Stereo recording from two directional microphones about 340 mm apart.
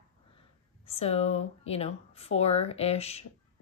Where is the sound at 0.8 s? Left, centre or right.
Centre.